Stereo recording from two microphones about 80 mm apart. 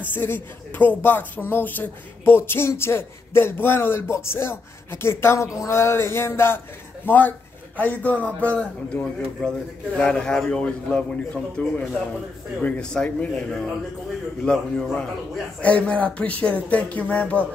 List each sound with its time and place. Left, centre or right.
0.1 s speech: left
5.7 s a sound: left
7.1 s a man's voice: left